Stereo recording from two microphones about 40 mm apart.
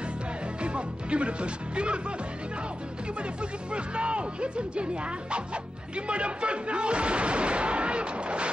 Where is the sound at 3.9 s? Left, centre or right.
Right.